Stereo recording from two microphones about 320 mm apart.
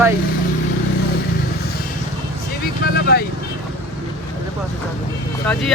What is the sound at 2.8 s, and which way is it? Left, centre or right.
Speech, left.